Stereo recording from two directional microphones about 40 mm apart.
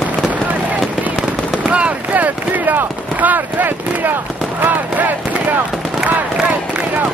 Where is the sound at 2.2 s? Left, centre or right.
Right.